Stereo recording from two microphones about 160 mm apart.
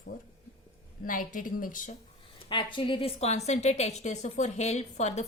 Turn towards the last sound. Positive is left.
turn(degrees=45)  # may be behind; listen again after turning